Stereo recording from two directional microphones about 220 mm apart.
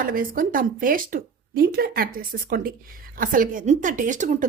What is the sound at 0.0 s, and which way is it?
Speech, 40° right (ahead or behind).